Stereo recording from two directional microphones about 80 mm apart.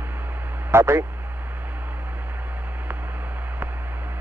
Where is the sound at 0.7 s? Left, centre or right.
Right.